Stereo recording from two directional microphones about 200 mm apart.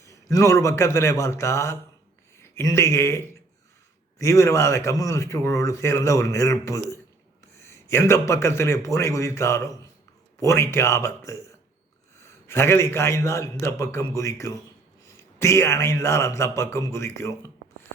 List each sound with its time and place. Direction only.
0.0 s a man's voice: 15° left (ahead or behind)